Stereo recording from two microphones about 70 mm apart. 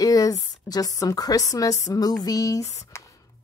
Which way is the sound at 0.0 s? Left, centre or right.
Left.